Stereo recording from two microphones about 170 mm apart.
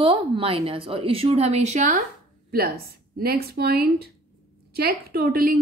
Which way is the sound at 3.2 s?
65° right (ahead or behind).